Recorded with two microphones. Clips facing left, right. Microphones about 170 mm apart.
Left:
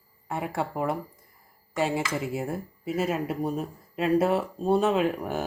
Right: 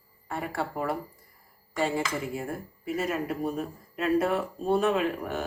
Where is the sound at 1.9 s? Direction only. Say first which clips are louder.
Left 1 dB; 25° left (ahead or behind).